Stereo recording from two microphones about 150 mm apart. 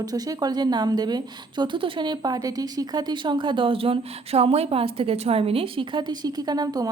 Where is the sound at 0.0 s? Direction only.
25° right (ahead or behind).